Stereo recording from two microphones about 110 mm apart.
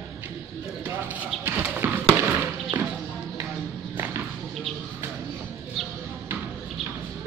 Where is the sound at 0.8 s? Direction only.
15° right (ahead or behind).